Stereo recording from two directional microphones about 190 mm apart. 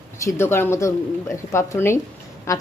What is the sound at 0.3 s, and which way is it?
A woman's voice, 10° left (ahead or behind).